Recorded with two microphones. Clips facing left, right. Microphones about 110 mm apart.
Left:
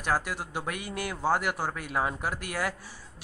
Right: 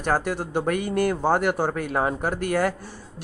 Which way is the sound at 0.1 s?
55° right (ahead or behind).